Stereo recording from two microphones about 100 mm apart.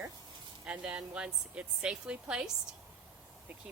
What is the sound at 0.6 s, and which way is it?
A woman's voice, 10° right (ahead or behind).